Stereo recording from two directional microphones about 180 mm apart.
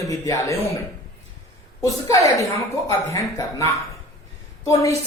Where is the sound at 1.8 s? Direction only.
20° left (ahead or behind).